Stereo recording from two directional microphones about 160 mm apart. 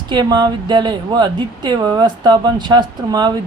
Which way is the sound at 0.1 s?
25° right (ahead or behind).